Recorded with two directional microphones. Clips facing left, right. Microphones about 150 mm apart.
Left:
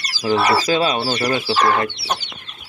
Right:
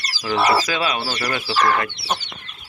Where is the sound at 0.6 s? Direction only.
30° left (ahead or behind).